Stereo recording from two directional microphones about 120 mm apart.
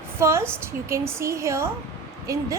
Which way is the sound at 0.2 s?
20° right (ahead or behind).